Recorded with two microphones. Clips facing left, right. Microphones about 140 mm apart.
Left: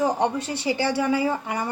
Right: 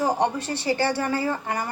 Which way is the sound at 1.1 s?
15° left (ahead or behind).